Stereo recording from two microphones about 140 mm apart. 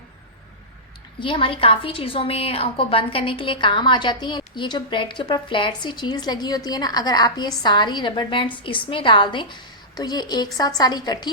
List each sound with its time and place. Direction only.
1.2 s a woman's voice: 40° left (ahead or behind)